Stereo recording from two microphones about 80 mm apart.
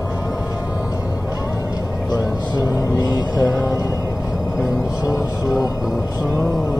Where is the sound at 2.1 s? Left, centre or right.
Left.